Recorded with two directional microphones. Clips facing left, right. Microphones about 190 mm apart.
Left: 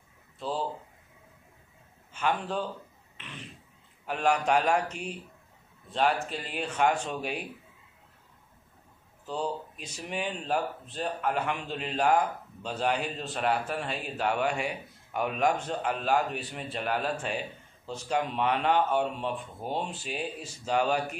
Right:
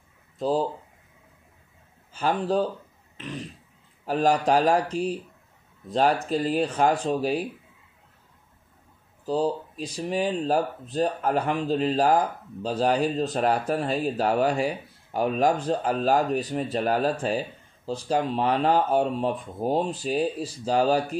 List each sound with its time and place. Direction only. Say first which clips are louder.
0.4 s speech: right 8 dB; 40° right (ahead or behind)
2.1 s speech: right 6 dB; 35° right (ahead or behind)
3.2 s throat clearing: right 11 dB; 40° right (ahead or behind)
4.0 s speech: right 5 dB; 35° right (ahead or behind)
9.2 s speech: right 8 dB; 35° right (ahead or behind)